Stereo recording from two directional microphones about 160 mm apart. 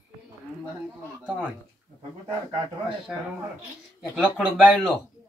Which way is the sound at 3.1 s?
Centre (ahead or behind).